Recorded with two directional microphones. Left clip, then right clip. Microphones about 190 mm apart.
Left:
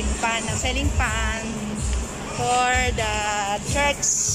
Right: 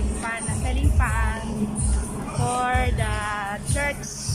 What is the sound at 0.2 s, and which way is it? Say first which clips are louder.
Music: left 6 dB; centre (ahead or behind).